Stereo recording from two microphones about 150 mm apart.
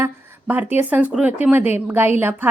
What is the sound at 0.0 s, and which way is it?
A woman's voice, 15° right (ahead or behind).